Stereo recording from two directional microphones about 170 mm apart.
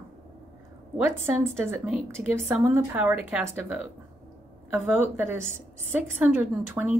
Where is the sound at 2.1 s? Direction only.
15° right (ahead or behind).